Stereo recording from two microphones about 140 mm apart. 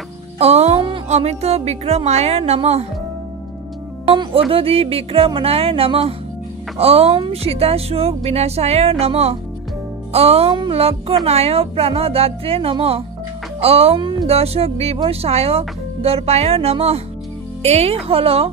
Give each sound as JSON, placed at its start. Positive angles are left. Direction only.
{"t": 0.4, "sound": "music", "side_deg": -50}
{"t": 1.0, "sound": "speech", "side_deg": -50}
{"t": 4.1, "sound": "speech", "side_deg": -40}